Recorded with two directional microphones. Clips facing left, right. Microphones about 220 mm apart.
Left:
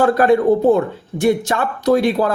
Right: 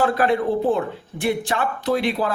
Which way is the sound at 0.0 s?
45° left (ahead or behind).